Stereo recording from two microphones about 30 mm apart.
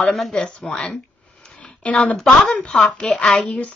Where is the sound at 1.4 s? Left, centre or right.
Left.